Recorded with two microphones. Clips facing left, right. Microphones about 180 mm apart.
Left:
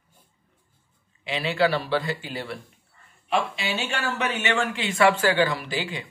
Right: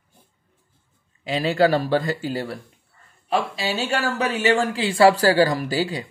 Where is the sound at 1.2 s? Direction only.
40° right (ahead or behind).